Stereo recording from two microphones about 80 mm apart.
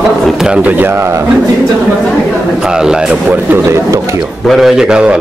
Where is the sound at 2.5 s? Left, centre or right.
Centre.